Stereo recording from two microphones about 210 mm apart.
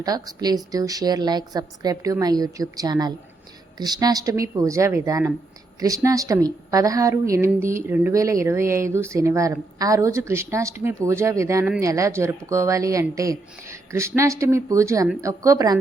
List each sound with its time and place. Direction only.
0.0 s a woman's voice: 15° right (ahead or behind)